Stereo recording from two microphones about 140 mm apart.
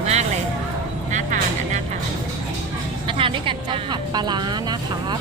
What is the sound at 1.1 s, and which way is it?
Speech, 60° right (ahead or behind).